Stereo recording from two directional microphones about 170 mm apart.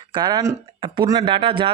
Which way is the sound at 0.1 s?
25° right (ahead or behind).